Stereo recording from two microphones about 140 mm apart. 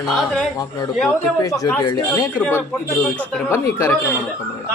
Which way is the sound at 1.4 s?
25° left (ahead or behind).